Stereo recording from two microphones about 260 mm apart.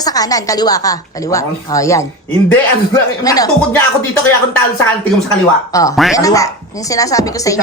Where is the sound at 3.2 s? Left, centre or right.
Centre.